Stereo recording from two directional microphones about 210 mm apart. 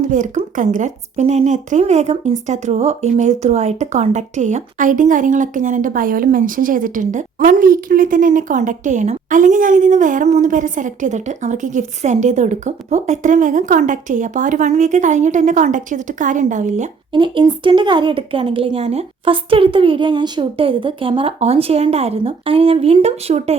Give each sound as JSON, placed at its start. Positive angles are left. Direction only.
{"t": 0.0, "sound": "speech", "side_deg": -35}
{"t": 17.2, "sound": "speech", "side_deg": -20}